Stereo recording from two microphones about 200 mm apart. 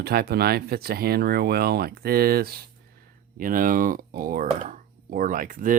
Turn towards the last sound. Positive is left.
turn(degrees=-40)  # may be behind; listen again after turning